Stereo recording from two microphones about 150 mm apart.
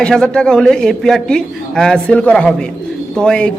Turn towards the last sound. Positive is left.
turn(degrees=5)  # may be behind; listen again after turning